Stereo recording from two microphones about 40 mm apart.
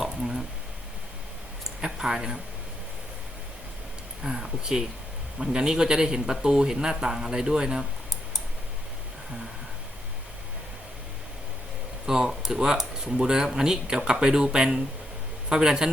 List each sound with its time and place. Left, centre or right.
0.0 s a sound: centre
1.8 s speech: centre
4.2 s speech: centre
12.0 s a man's voice: centre